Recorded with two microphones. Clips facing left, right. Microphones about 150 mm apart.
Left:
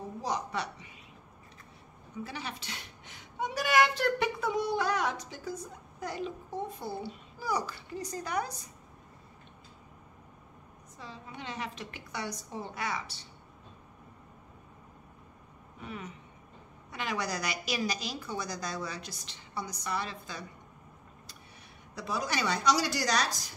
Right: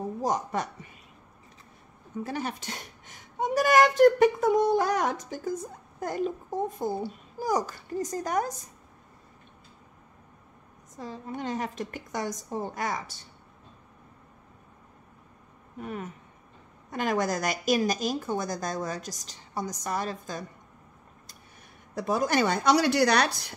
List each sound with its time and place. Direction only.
0.2 s a woman's voice: 45° right (ahead or behind)
2.1 s a woman's voice: 45° right (ahead or behind)
11.0 s a woman's voice: 45° right (ahead or behind)
15.8 s a woman's voice: 50° right (ahead or behind)
21.9 s a woman's voice: 50° right (ahead or behind)